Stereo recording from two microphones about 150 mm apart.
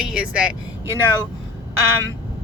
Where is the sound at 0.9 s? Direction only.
20° right (ahead or behind).